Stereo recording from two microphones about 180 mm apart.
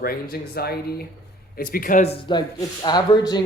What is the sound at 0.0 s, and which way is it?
Speech, 60° left (ahead or behind).